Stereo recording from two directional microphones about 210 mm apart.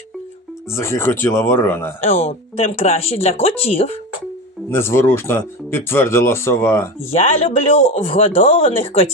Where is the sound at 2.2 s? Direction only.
30° left (ahead or behind).